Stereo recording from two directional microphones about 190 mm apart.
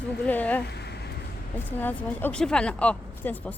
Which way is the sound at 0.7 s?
60° left (ahead or behind).